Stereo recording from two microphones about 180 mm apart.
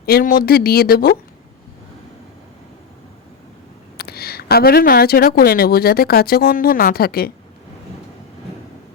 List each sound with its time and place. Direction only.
0.0 s speech: 55° left (ahead or behind)
3.9 s speech: 60° left (ahead or behind)